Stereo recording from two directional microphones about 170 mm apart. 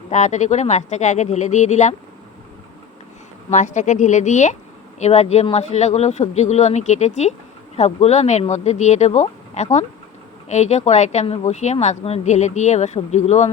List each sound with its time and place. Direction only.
0.1 s speech: 45° left (ahead or behind)
3.5 s speech: 45° left (ahead or behind)